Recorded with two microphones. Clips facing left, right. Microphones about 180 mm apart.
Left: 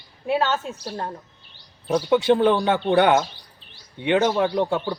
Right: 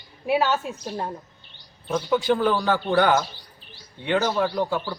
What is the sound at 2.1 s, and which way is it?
A man's voice, 25° left (ahead or behind).